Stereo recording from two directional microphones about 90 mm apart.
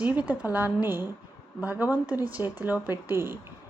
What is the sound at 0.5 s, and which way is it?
Speech, 20° right (ahead or behind).